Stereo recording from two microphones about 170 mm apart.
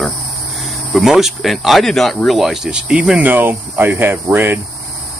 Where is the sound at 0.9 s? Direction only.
Centre (ahead or behind).